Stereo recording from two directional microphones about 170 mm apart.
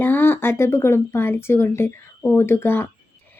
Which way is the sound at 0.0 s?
15° left (ahead or behind).